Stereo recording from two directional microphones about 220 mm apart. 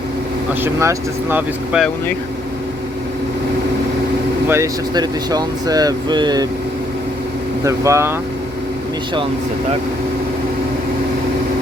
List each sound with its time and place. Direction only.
0.6 s speech: 10° right (ahead or behind)
4.4 s speech: 15° right (ahead or behind)
7.6 s speech: 15° right (ahead or behind)